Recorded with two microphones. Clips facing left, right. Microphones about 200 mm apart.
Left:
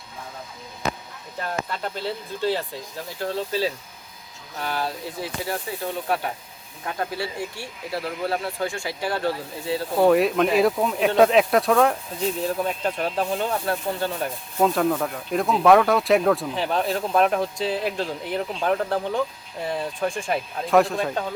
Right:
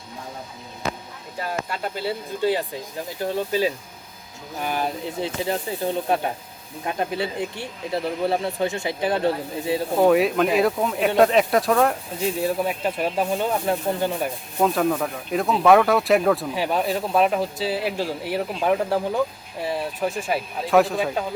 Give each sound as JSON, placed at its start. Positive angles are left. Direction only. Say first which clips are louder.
{"t": 1.4, "sound": "speech", "louder": "right 1 dB", "side_deg": -10}
{"t": 10.0, "sound": "speech", "louder": "even", "side_deg": 0}
{"t": 14.6, "sound": "speech", "louder": "even", "side_deg": 0}